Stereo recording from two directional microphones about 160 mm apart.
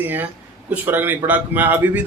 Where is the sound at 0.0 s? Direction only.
10° right (ahead or behind).